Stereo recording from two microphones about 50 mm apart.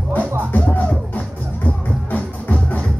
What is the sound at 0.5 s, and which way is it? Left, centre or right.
Music, left.